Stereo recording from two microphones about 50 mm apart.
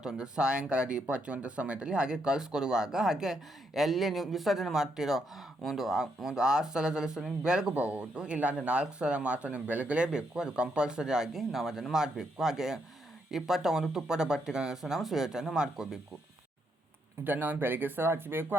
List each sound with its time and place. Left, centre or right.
0.0 s speech: centre
7.7 s speech: right
17.2 s speech: right